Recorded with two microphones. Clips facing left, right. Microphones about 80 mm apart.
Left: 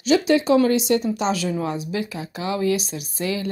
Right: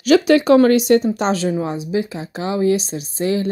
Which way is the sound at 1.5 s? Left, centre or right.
Right.